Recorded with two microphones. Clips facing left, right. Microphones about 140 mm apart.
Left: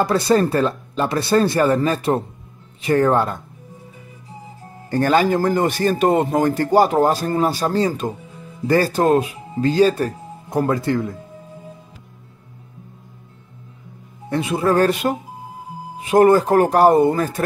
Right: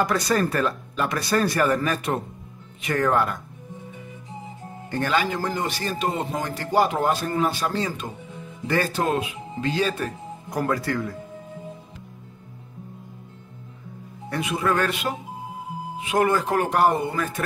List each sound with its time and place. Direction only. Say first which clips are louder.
0.0 s speech: left 6 dB; 30° left (ahead or behind)
4.9 s speech: left 8 dB; 40° left (ahead or behind)
10.5 s speech: left 6 dB; 25° left (ahead or behind)
14.3 s speech: left 6 dB; 30° left (ahead or behind)